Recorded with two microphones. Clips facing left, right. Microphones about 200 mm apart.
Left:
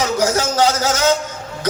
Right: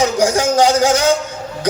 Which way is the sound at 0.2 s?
15° right (ahead or behind).